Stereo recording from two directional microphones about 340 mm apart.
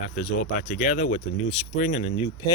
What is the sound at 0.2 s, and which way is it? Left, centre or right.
Speech, left.